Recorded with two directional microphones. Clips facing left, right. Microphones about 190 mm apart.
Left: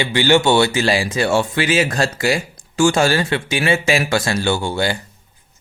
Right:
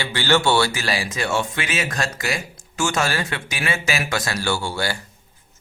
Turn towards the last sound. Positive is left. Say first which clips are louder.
# left 5 dB
turn(degrees=20)  # may be behind; listen again after turning